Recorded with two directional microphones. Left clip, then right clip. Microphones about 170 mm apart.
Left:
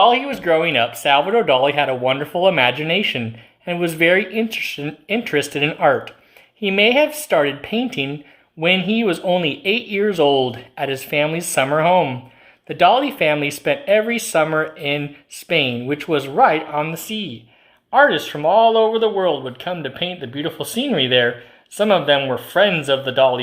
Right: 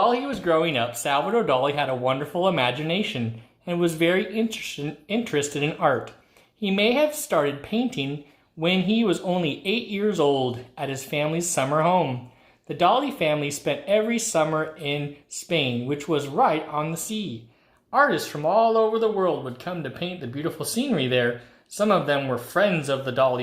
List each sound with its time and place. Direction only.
0.3 s speech: 25° left (ahead or behind)